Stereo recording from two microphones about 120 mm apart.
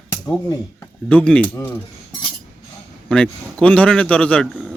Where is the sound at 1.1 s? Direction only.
10° left (ahead or behind).